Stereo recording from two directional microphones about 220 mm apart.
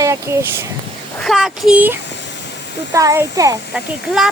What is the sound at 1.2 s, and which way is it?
Speech, centre (ahead or behind).